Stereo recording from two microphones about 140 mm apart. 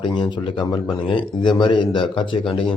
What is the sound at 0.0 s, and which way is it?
A man's voice, 35° left (ahead or behind).